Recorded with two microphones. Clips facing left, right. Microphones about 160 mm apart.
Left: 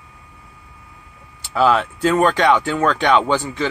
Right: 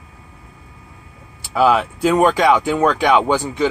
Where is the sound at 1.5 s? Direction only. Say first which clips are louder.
Right 1 dB; 10° right (ahead or behind).